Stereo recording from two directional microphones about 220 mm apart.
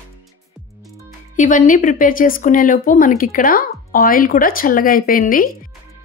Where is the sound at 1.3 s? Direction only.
35° left (ahead or behind).